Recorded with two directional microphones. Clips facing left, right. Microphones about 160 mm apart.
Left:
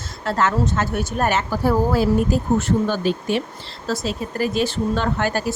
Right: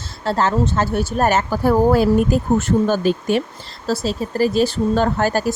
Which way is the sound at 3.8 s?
35° right (ahead or behind).